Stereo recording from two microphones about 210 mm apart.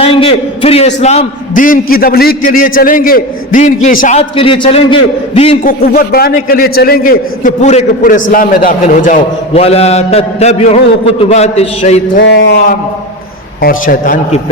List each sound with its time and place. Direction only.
0.0 s a man's voice: 25° left (ahead or behind)
4.2 s a man's voice: 25° left (ahead or behind)
5.6 s a man's voice: 45° left (ahead or behind); by 12.0 s 30° left (ahead or behind)
12.1 s a man's voice: 55° left (ahead or behind); by 14.4 s 40° left (ahead or behind)